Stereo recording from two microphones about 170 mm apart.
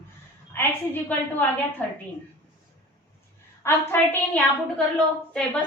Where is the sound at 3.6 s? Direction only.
15° left (ahead or behind).